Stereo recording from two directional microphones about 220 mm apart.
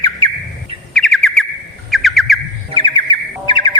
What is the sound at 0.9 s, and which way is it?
Bird, centre (ahead or behind).